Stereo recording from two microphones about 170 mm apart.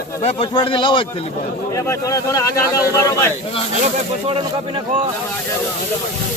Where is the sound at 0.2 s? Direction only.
35° left (ahead or behind).